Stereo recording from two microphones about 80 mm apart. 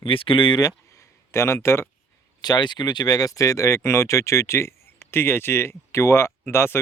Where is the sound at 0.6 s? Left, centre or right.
Left.